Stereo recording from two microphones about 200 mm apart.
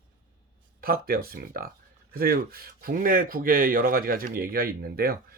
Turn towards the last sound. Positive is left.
turn(degrees=-50)  # may be behind; listen again after turning